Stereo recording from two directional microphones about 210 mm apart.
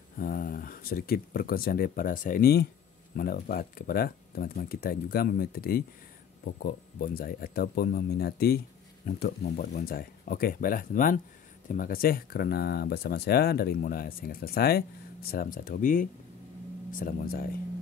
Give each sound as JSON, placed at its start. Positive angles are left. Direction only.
{"t": 0.2, "sound": "speech", "side_deg": 45}